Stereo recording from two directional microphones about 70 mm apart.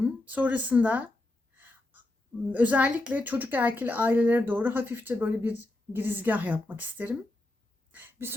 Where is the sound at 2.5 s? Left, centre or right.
Right.